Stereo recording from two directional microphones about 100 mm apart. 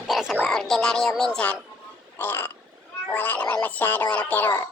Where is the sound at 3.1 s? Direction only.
15° left (ahead or behind).